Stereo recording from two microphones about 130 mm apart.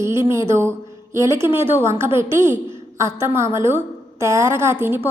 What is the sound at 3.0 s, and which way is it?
A woman's voice, 20° right (ahead or behind).